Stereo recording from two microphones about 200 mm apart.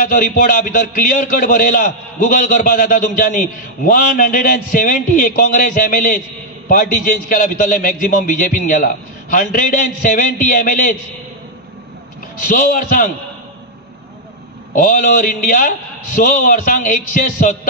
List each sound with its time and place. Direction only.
0.0 s a man's voice: 45° left (ahead or behind)
12.4 s a man's voice: 45° left (ahead or behind)
14.8 s a man's voice: 45° left (ahead or behind)